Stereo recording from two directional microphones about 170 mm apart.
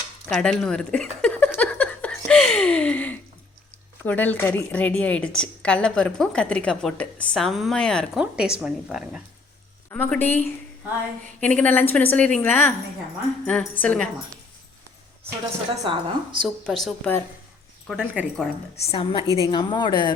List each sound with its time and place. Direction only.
0.3 s speech: 5° left (ahead or behind)
1.5 s a sound: 10° left (ahead or behind)
4.0 s a woman's voice: 10° left (ahead or behind)
8.2 s a woman's voice: 5° right (ahead or behind)
9.9 s a woman's voice: 10° left (ahead or behind)
15.8 s a woman's voice: 30° right (ahead or behind)
16.6 s a woman's voice: 5° left (ahead or behind)
17.8 s speech: 5° right (ahead or behind)
18.9 s a woman's voice: 35° left (ahead or behind)